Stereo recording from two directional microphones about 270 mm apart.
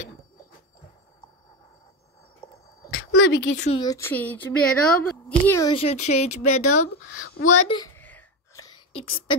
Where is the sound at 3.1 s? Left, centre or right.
Left.